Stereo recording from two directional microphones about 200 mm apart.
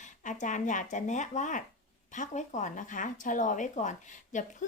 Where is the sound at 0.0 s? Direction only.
40° left (ahead or behind).